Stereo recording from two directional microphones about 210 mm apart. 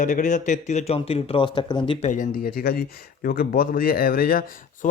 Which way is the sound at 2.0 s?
40° left (ahead or behind).